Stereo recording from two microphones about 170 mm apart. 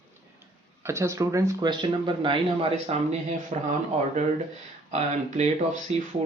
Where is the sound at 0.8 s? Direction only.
15° right (ahead or behind); by 3.7 s 40° right (ahead or behind).